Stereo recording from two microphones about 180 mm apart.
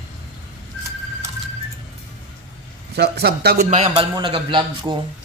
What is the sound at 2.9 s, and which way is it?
Speech, 65° right (ahead or behind).